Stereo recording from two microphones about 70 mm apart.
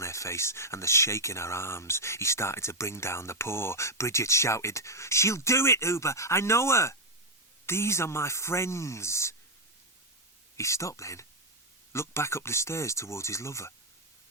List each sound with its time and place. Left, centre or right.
0.0 s speech: left
10.6 s speech: left